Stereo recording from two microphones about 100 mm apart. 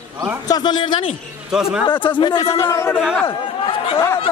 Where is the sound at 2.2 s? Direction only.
50° left (ahead or behind).